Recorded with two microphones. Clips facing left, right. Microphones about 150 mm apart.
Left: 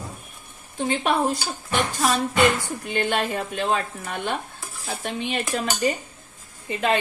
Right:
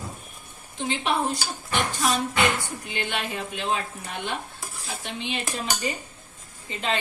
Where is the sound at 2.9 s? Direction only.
45° left (ahead or behind).